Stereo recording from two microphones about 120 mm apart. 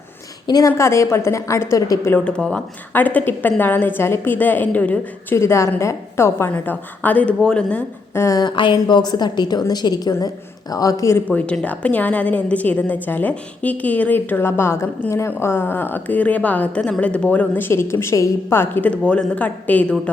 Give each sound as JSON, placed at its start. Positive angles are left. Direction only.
{"t": 0.4, "sound": "a woman's voice", "side_deg": 30}
{"t": 0.7, "sound": "a woman's voice", "side_deg": 20}
{"t": 2.0, "sound": "a woman's voice", "side_deg": 10}
{"t": 8.2, "sound": "a woman's voice", "side_deg": 30}
{"t": 11.3, "sound": "a woman's voice", "side_deg": 10}